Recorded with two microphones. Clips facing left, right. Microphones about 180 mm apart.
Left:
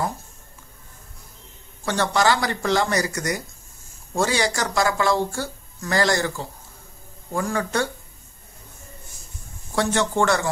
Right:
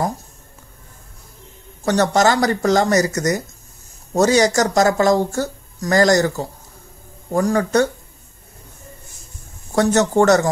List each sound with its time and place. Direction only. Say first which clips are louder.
1.9 s speech: right 5 dB; 45° right (ahead or behind)
9.8 s speech: right 6 dB; 45° right (ahead or behind)